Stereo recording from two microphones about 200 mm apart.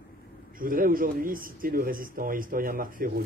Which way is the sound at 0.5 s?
45° right (ahead or behind).